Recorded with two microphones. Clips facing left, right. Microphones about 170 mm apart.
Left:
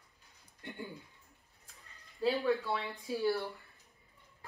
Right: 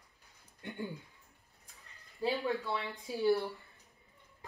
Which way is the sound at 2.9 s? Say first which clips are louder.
Right 4 dB; 20° right (ahead or behind).